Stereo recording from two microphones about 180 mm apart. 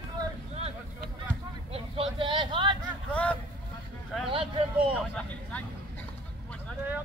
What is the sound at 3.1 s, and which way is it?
Vehicle, 5° left (ahead or behind).